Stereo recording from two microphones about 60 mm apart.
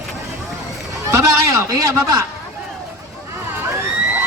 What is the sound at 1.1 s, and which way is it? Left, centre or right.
Speech, right.